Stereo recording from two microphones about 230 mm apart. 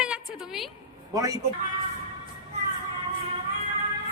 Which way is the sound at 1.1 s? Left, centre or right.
Centre.